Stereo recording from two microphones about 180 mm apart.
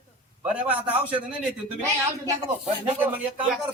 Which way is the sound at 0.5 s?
10° right (ahead or behind).